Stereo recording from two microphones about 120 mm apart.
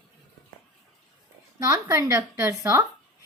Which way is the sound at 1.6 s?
35° right (ahead or behind).